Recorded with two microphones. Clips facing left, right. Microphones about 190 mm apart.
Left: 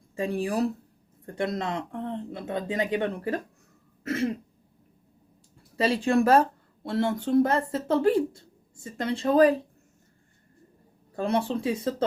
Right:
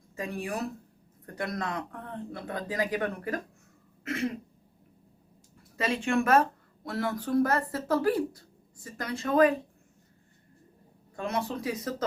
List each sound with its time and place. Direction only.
0.2 s a woman's voice: 30° left (ahead or behind)
5.7 s a woman's voice: 30° left (ahead or behind)
11.2 s a woman's voice: 30° left (ahead or behind)